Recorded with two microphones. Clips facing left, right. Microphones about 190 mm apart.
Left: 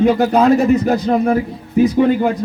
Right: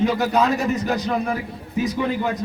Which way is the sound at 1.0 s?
55° left (ahead or behind).